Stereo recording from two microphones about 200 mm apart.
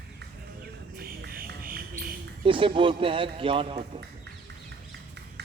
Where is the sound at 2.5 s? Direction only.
25° right (ahead or behind).